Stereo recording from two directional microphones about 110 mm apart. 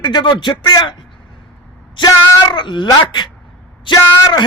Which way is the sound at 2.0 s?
45° left (ahead or behind).